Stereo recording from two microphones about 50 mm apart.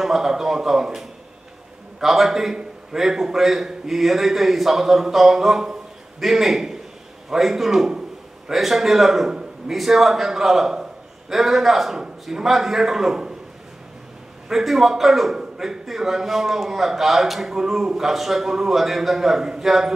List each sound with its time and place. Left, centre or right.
0.0 s a man's voice: centre
14.5 s a man's voice: centre